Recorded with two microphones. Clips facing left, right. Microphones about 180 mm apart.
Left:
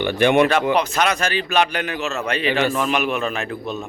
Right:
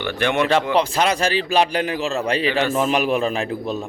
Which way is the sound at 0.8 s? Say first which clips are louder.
Right 1 dB; 30° right (ahead or behind).